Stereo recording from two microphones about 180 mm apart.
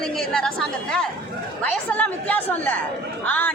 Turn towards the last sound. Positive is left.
turn(degrees=10)  # may be behind; listen again after turning